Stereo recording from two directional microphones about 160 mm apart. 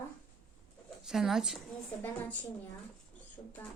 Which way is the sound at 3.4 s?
15° left (ahead or behind).